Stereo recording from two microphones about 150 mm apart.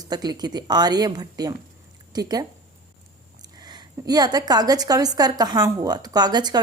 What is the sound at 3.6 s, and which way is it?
Speech, 25° right (ahead or behind).